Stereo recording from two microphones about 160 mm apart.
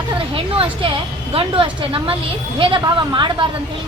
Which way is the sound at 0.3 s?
35° right (ahead or behind).